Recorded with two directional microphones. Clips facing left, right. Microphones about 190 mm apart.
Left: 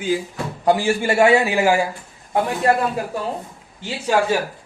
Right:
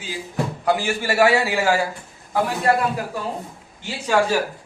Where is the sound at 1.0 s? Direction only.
20° left (ahead or behind).